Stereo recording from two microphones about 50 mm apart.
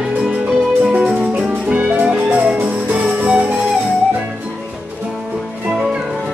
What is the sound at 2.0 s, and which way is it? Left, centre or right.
Music, right.